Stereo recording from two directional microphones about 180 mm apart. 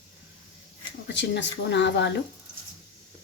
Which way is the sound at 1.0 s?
75° left (ahead or behind).